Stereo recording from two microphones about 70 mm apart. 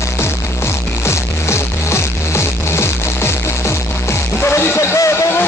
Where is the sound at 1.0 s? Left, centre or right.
Left.